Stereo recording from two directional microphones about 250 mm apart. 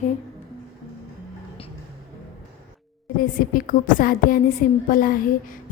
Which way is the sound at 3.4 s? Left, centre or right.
Left.